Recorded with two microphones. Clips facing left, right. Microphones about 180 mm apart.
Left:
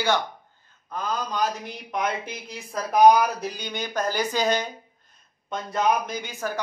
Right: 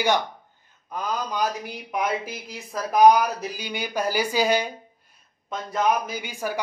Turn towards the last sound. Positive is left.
turn(degrees=-15)  # may be behind; listen again after turning